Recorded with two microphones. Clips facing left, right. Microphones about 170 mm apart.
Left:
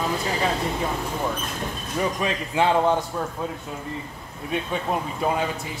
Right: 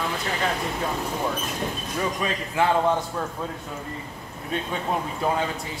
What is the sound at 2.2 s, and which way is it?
Speech, 20° left (ahead or behind).